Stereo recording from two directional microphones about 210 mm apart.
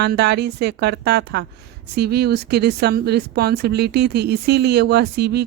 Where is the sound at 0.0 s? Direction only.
55° right (ahead or behind).